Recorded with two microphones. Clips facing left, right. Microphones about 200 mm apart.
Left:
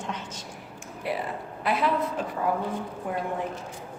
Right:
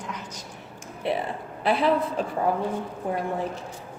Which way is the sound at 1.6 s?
30° right (ahead or behind).